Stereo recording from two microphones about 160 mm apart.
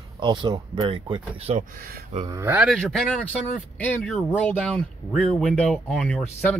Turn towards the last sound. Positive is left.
turn(degrees=5)  # may be behind; listen again after turning